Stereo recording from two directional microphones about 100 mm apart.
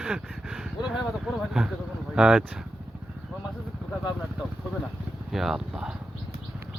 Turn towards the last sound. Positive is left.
turn(degrees=-5)  # may be behind; listen again after turning